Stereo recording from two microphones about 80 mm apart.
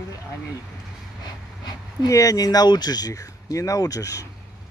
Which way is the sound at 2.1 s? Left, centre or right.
Left.